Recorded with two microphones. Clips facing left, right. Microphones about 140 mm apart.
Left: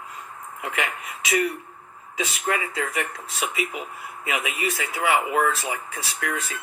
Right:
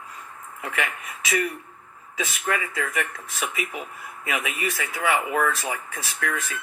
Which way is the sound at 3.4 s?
40° right (ahead or behind).